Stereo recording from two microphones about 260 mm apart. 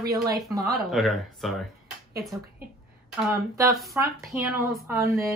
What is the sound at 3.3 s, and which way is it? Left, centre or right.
A woman's voice, centre.